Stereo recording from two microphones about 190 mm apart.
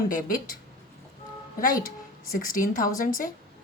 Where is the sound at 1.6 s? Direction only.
45° left (ahead or behind).